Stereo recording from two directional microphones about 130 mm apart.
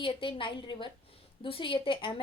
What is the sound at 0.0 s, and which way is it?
A woman's voice, 40° left (ahead or behind).